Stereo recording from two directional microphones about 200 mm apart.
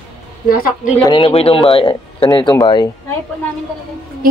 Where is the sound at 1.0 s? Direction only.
25° left (ahead or behind).